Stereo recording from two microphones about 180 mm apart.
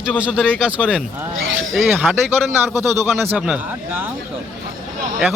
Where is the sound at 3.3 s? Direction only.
Centre (ahead or behind).